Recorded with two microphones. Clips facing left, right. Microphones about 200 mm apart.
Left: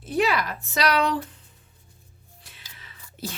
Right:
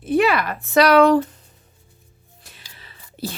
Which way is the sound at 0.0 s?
60° right (ahead or behind).